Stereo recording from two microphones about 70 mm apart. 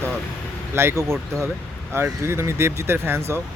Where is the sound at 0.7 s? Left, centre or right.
Right.